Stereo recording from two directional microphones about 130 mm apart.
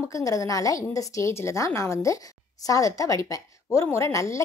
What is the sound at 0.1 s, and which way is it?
A woman's voice, 25° left (ahead or behind).